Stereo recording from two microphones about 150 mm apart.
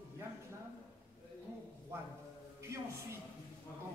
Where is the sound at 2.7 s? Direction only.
20° right (ahead or behind).